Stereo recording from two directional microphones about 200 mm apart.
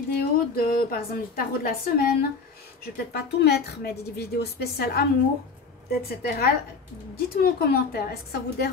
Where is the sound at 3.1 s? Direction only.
55° left (ahead or behind).